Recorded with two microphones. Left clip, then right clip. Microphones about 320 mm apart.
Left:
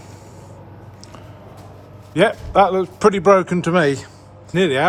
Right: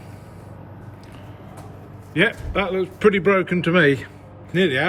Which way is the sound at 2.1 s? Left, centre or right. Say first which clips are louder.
Left 4 dB; centre.